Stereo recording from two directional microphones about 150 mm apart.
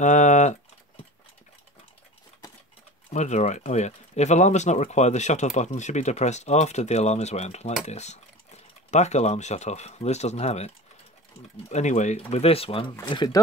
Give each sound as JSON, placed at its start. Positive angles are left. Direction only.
{"t": 0.0, "sound": "speech", "side_deg": 55}
{"t": 3.1, "sound": "speech", "side_deg": 50}
{"t": 11.7, "sound": "speech", "side_deg": 50}
{"t": 12.9, "sound": "speech", "side_deg": 25}